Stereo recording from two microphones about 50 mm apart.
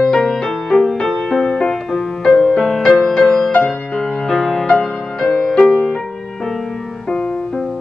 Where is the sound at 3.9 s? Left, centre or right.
Centre.